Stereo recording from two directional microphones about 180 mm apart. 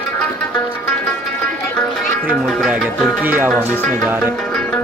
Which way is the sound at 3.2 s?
10° right (ahead or behind).